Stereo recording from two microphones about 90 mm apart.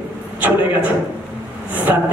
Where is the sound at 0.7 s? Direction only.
20° right (ahead or behind).